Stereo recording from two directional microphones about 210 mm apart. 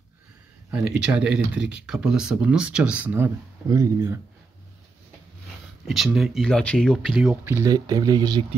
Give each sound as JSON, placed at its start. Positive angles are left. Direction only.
{"t": 0.7, "sound": "speech", "side_deg": -5}
{"t": 5.9, "sound": "speech", "side_deg": 0}
{"t": 7.5, "sound": "speech", "side_deg": -20}